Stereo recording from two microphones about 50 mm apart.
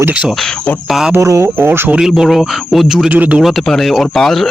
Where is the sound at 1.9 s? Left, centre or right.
Centre.